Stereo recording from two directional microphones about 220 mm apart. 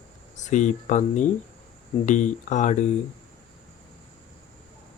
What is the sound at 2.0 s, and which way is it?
Speech, 35° left (ahead or behind).